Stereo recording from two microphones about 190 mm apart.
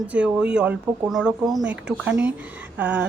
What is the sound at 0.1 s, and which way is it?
Speech, 5° right (ahead or behind).